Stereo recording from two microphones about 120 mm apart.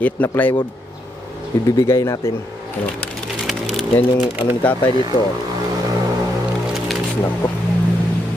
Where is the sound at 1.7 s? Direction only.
30° left (ahead or behind).